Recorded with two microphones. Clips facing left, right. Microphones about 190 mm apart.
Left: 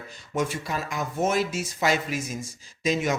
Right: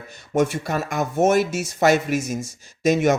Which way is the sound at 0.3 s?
65° right (ahead or behind).